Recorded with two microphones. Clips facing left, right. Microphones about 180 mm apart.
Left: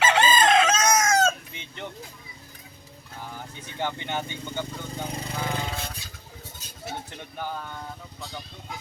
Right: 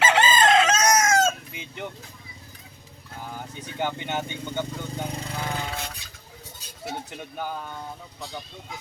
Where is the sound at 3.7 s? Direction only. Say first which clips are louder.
Right 1 dB; 15° right (ahead or behind).